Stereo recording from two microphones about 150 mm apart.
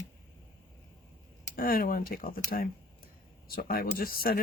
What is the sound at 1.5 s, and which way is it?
Speech, 75° left (ahead or behind).